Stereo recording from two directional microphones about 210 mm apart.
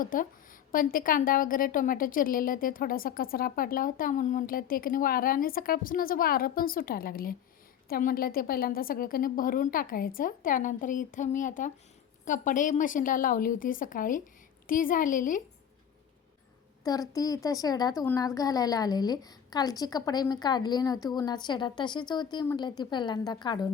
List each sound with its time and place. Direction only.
0.0 s a woman's voice: 40° left (ahead or behind)
16.8 s a woman's voice: 15° left (ahead or behind)